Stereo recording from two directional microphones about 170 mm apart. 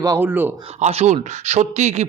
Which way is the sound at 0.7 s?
40° right (ahead or behind).